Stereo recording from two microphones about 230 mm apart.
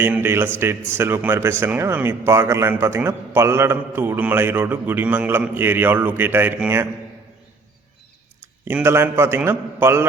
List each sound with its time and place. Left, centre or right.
0.0 s speech: centre
8.6 s speech: centre